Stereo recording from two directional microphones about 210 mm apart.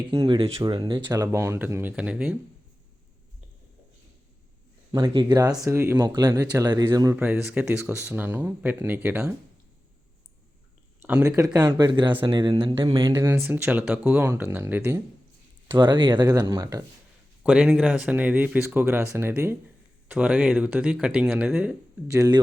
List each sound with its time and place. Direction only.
0.1 s speech: 25° right (ahead or behind); by 2.3 s 5° right (ahead or behind)
4.9 s speech: 20° right (ahead or behind)
11.0 s speech: 15° right (ahead or behind)
17.4 s speech: 5° right (ahead or behind)